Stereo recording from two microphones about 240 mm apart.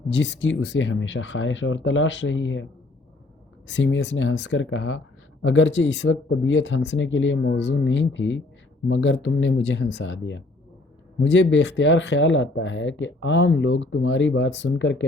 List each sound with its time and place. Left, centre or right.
0.1 s speech: left
3.7 s speech: left